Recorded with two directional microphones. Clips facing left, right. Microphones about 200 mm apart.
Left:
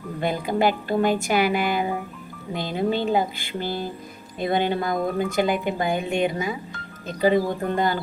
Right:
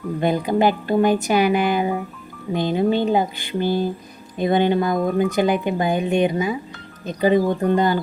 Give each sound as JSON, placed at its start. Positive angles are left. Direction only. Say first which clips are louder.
{"t": 0.2, "sound": "speech", "louder": "right 4 dB", "side_deg": -20}